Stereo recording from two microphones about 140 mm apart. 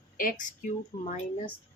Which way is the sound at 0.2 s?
70° left (ahead or behind).